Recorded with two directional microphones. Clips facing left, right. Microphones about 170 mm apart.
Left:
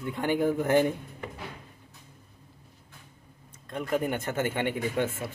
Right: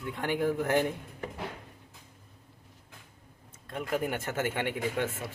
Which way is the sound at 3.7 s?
5° right (ahead or behind).